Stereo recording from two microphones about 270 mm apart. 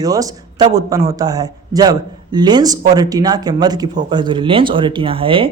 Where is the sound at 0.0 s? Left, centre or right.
Centre.